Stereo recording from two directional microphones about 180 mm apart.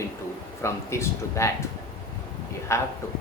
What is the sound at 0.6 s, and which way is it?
Speech, 15° left (ahead or behind).